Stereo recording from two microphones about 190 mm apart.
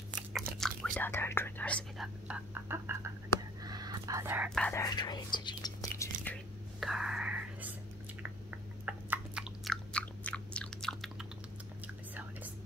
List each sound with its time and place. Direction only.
0.3 s whispering: centre (ahead or behind)
2.2 s a sound: 10° right (ahead or behind)
3.6 s whispering: 20° right (ahead or behind)
4.6 s whispering: 10° left (ahead or behind)
4.8 s whispering: 20° left (ahead or behind)
6.8 s whispering: centre (ahead or behind)
8.2 s chewing: 10° right (ahead or behind)
12.1 s whispering: 10° right (ahead or behind)